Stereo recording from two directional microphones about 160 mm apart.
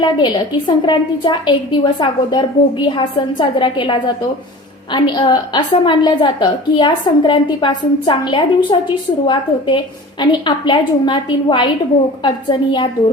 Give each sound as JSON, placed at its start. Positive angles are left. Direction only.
{"t": 0.0, "sound": "a woman's voice", "side_deg": 30}